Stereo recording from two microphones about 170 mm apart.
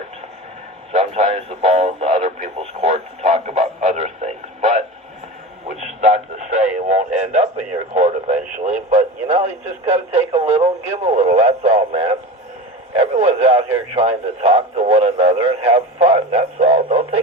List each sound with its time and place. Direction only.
0.9 s speech: 35° right (ahead or behind)
10.4 s speech: 15° right (ahead or behind)
10.9 s speech: 40° right (ahead or behind)